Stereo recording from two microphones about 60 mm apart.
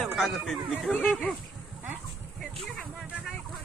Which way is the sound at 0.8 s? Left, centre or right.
Centre.